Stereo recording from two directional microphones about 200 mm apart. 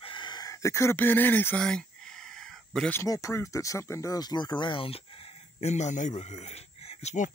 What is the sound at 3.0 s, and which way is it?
Speech, 15° left (ahead or behind).